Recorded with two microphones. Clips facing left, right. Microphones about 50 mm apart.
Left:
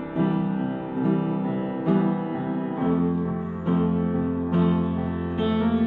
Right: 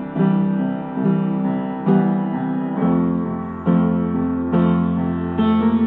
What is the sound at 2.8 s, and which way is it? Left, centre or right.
Music, centre.